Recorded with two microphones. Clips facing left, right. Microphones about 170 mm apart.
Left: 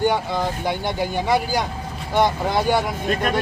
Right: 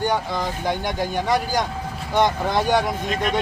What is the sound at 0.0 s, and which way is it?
Speech, 10° left (ahead or behind).